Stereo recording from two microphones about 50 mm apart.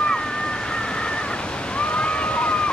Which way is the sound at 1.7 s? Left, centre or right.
Left.